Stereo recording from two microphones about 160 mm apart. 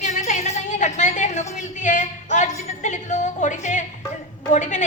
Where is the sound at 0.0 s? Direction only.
50° left (ahead or behind).